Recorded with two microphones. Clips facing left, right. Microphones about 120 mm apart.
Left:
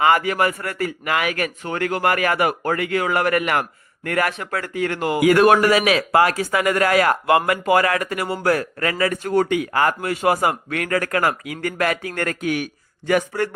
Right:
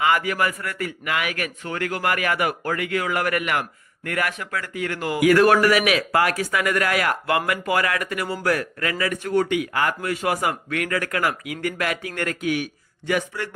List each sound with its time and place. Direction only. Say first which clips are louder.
0.0 s a man's voice: left 4 dB; 35° left (ahead or behind)